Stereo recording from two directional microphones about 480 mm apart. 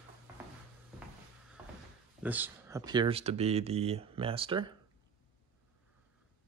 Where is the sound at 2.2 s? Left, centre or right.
Centre.